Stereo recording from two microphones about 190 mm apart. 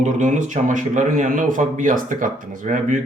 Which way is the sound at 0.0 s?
40° right (ahead or behind).